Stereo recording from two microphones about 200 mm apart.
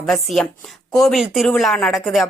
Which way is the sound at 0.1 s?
Centre (ahead or behind).